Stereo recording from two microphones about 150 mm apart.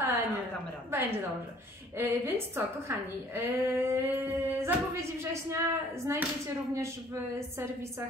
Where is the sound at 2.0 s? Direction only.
15° right (ahead or behind).